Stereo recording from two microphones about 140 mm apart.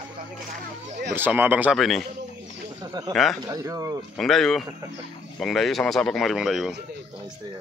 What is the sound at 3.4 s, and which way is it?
Speech, 25° right (ahead or behind).